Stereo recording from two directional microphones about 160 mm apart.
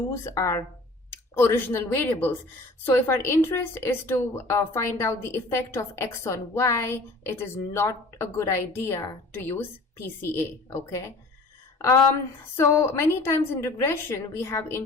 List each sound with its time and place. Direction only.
0.1 s a woman's voice: 20° left (ahead or behind)
12.5 s a woman's voice: 15° left (ahead or behind)